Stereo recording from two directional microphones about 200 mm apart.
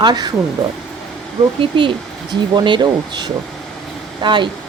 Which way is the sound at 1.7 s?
25° right (ahead or behind).